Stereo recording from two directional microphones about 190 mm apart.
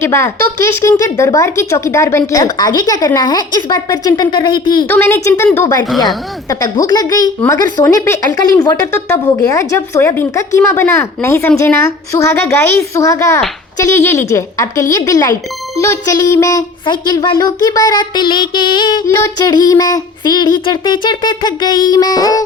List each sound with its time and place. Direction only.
0.0 s speech: 15° left (ahead or behind)
4.9 s speech: 10° left (ahead or behind)